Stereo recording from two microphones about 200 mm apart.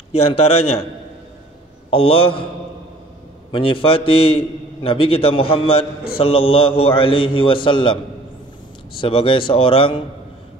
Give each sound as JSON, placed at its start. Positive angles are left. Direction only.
{"t": 0.1, "sound": "a man's voice", "side_deg": 30}
{"t": 1.9, "sound": "a man's voice", "side_deg": 25}
{"t": 3.5, "sound": "a man's voice", "side_deg": 25}
{"t": 9.0, "sound": "a man's voice", "side_deg": 25}